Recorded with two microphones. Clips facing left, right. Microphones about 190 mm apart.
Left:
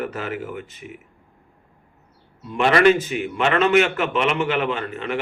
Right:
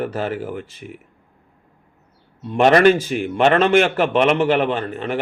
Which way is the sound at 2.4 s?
35° right (ahead or behind).